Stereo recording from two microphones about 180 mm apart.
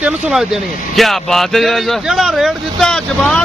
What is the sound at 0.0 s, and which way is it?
Speech, centre (ahead or behind).